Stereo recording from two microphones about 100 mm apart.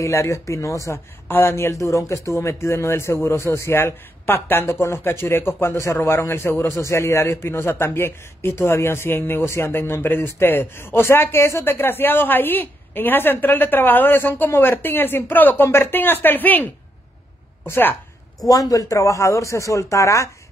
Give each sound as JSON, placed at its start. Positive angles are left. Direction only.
{"t": 0.0, "sound": "a man's voice", "side_deg": 30}
{"t": 18.5, "sound": "speech", "side_deg": 35}